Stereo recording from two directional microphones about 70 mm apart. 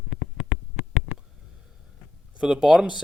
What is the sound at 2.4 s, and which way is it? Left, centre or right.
Speech, centre.